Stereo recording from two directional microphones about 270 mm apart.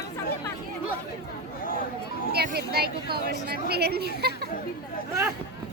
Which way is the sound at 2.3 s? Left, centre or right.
Right.